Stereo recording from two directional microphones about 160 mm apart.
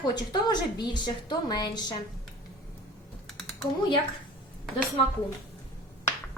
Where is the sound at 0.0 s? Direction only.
25° left (ahead or behind).